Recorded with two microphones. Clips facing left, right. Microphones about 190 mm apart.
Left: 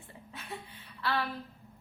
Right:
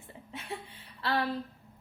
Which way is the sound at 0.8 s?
35° right (ahead or behind).